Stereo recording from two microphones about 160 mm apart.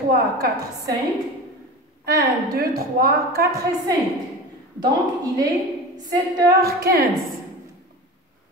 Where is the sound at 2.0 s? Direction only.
65° right (ahead or behind).